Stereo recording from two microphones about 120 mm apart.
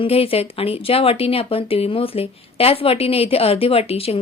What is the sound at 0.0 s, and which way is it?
A woman's voice, 55° left (ahead or behind).